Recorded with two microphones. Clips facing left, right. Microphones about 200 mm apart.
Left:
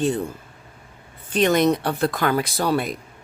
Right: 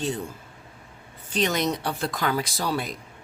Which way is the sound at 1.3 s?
55° left (ahead or behind).